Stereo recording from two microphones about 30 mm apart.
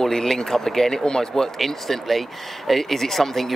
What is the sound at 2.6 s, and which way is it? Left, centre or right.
Speech, centre.